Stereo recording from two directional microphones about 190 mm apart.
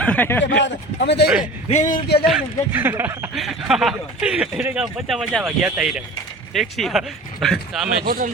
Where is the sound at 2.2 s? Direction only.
10° right (ahead or behind).